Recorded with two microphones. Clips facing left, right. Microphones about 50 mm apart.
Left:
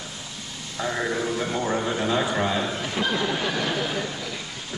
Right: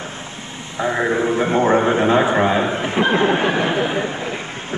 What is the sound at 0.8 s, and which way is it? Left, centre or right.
A man's voice, right.